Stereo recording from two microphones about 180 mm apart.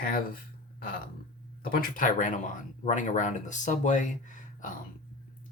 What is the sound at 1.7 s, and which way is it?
Speech, 50° left (ahead or behind).